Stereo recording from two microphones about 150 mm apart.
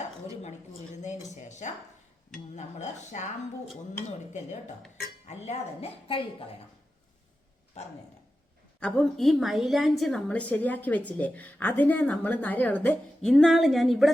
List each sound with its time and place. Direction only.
1.0 s a woman's voice: 50° left (ahead or behind)
5.3 s a woman's voice: 45° left (ahead or behind)
7.8 s a woman's voice: 50° left (ahead or behind)
8.8 s a woman's voice: 5° left (ahead or behind)
13.3 s speech: centre (ahead or behind)